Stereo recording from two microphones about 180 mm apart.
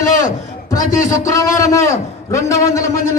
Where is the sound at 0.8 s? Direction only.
50° left (ahead or behind).